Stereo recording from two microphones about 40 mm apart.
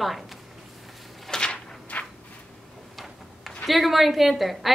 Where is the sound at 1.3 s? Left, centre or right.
Left.